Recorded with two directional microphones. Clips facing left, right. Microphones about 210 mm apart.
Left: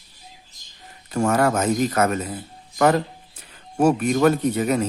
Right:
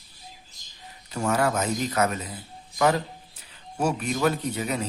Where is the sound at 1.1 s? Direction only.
50° left (ahead or behind).